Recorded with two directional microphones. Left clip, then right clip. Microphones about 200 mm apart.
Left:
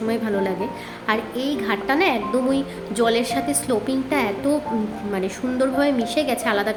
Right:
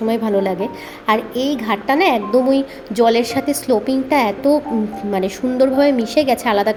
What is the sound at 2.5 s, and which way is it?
A child's voice, 20° right (ahead or behind).